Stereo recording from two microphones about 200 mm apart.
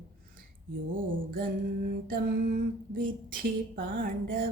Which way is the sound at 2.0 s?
45° right (ahead or behind).